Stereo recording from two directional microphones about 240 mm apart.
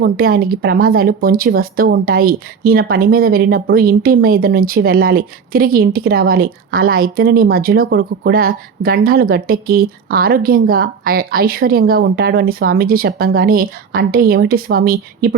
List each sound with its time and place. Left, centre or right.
0.0 s speech: right